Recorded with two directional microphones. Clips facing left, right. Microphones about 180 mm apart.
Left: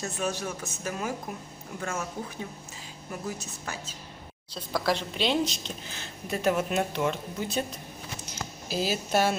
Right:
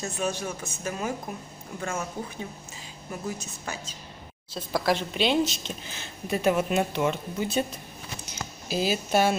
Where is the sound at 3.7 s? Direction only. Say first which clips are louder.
Right 2 dB; centre (ahead or behind).